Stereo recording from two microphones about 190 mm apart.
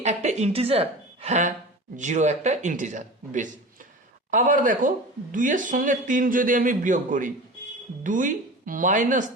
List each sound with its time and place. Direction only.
0.0 s a woman's voice: 35° right (ahead or behind)